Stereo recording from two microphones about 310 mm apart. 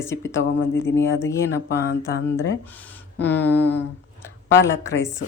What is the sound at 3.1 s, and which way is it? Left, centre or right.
Speech, left.